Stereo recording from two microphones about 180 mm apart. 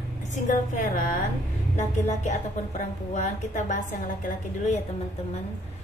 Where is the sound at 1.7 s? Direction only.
40° left (ahead or behind).